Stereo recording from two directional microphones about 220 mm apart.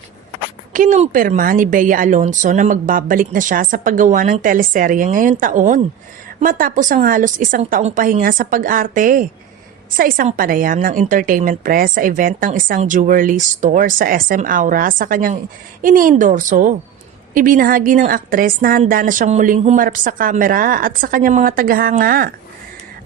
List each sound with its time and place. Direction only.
0.7 s a woman's voice: 35° right (ahead or behind)